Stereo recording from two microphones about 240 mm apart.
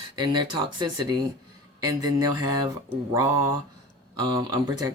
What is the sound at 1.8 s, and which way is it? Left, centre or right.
Speech, right.